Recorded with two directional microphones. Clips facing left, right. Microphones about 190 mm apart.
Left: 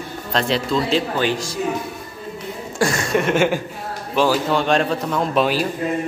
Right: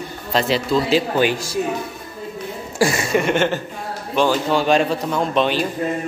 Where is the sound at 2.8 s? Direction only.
5° right (ahead or behind).